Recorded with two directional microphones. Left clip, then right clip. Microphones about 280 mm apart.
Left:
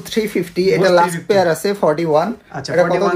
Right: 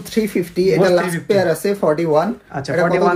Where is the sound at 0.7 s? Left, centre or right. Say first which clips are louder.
Left 4 dB; centre.